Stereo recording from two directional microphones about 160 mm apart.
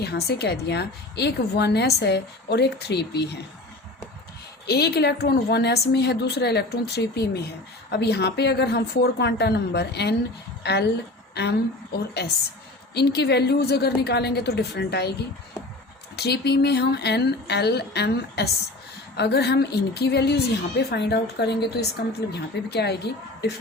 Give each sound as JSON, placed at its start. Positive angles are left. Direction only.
{"t": 0.0, "sound": "a woman's voice", "side_deg": 90}
{"t": 4.6, "sound": "a woman's voice", "side_deg": 90}
{"t": 16.1, "sound": "a woman's voice", "side_deg": 90}